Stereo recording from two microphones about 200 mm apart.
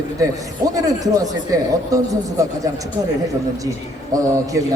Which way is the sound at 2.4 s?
15° right (ahead or behind).